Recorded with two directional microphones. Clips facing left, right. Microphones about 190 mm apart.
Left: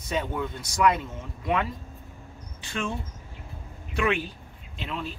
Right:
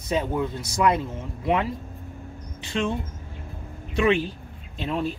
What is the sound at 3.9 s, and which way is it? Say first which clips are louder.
Speech: right 5 dB; 25° right (ahead or behind).